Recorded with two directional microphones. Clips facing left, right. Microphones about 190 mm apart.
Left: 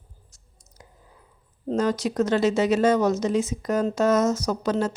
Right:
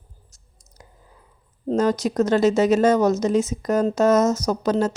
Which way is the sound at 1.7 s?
40° right (ahead or behind).